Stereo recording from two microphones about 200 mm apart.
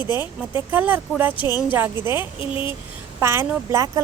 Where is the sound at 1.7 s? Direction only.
10° right (ahead or behind).